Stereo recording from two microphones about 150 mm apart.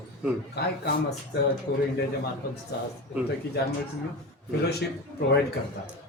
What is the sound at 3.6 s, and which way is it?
Speech, 90° left.